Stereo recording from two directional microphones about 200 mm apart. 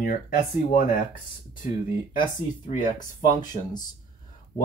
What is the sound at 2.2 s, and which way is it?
Speech, 25° left (ahead or behind).